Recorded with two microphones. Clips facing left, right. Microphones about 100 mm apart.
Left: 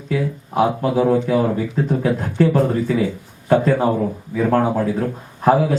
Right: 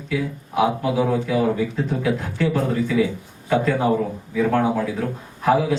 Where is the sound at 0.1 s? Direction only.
40° left (ahead or behind).